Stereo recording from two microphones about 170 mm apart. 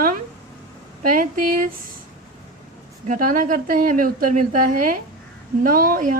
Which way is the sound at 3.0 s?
50° right (ahead or behind).